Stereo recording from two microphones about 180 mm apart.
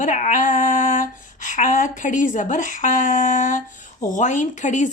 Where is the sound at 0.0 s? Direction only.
45° left (ahead or behind).